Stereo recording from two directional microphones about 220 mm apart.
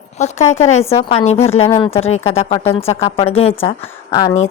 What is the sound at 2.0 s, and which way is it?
A woman's voice, 30° left (ahead or behind).